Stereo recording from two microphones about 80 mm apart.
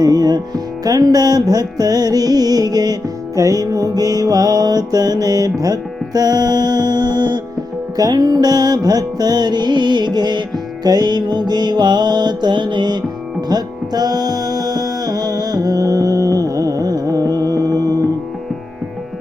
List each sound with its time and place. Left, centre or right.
0.0 s music: right
7.9 s music: right
13.5 s music: right